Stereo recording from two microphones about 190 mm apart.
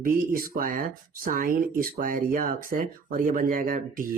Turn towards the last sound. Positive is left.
turn(degrees=-45)  # may be behind; listen again after turning